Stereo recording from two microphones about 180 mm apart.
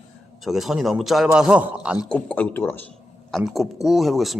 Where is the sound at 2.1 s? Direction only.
10° left (ahead or behind).